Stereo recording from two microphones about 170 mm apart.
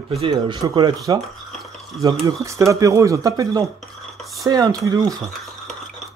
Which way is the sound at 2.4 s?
20° right (ahead or behind).